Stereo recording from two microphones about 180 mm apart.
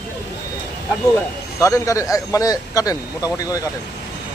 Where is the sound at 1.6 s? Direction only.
15° left (ahead or behind).